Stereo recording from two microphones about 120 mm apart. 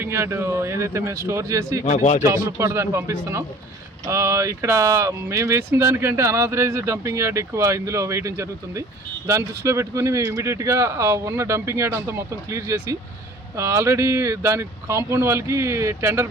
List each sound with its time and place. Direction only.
0.0 s speech: 20° right (ahead or behind)
1.8 s speech: 70° left (ahead or behind)
2.2 s speech: 25° right (ahead or behind)